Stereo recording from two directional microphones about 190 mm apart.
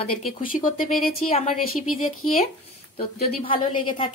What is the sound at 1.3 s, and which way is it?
Speech, 35° left (ahead or behind).